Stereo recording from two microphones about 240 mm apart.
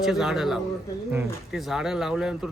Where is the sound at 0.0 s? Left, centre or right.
Centre.